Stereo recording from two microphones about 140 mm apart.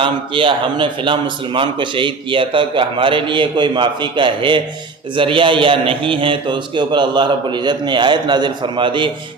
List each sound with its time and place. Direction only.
0.0 s a man's voice: 35° right (ahead or behind)